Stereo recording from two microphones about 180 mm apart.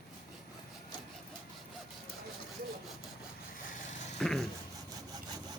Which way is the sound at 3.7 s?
45° left (ahead or behind).